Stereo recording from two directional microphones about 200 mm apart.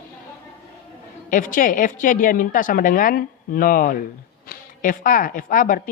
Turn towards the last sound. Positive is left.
turn(degrees=45)  # may be behind; listen again after turning